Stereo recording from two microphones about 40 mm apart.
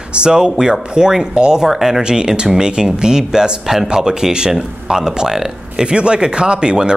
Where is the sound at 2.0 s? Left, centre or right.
Centre.